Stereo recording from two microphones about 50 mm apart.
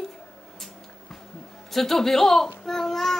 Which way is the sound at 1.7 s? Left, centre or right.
Centre.